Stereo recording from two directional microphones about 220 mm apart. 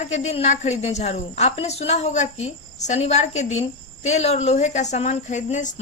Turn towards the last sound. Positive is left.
turn(degrees=35)  # may be behind; listen again after turning